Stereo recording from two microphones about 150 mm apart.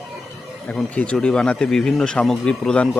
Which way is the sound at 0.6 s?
10° left (ahead or behind).